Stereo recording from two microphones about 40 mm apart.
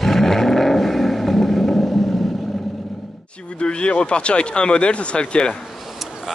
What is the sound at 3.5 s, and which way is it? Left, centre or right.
Speech, left.